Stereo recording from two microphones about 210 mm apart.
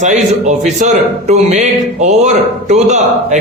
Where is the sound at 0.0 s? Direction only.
35° right (ahead or behind).